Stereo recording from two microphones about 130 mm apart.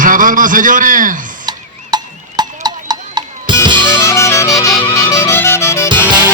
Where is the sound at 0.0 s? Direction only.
90° right.